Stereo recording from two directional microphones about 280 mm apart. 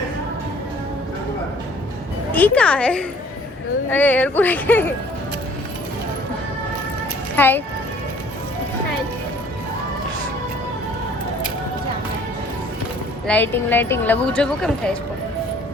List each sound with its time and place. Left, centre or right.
2.3 s a woman's voice: centre
7.3 s speech: centre
13.2 s speech: centre